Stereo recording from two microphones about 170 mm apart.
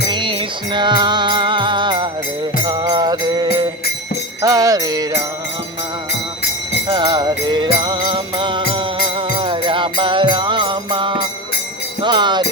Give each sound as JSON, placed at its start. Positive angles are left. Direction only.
{"t": 0.1, "sound": "music", "side_deg": -30}
{"t": 6.8, "sound": "music", "side_deg": -30}
{"t": 12.0, "sound": "jingle bell", "side_deg": -25}